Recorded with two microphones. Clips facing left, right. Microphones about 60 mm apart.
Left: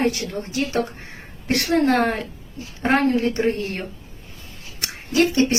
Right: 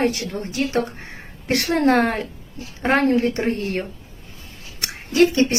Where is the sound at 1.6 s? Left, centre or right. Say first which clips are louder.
Right 1 dB; right.